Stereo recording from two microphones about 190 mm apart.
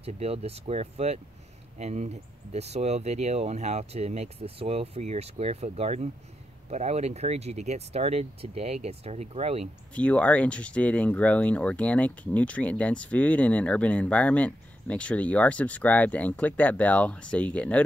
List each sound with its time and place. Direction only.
0.0 s speech: 30° right (ahead or behind)
9.9 s speech: 5° left (ahead or behind)